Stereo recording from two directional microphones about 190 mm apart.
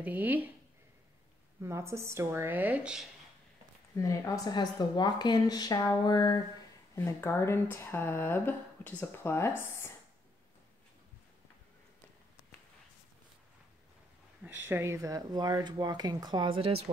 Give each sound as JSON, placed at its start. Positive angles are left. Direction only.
{"t": 0.0, "sound": "speech", "side_deg": -10}
{"t": 1.6, "sound": "speech", "side_deg": -15}
{"t": 3.9, "sound": "speech", "side_deg": 15}
{"t": 14.4, "sound": "speech", "side_deg": -10}